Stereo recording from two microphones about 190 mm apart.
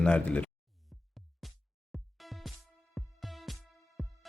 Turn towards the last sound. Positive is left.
turn(degrees=0)  # may be behind; listen again after turning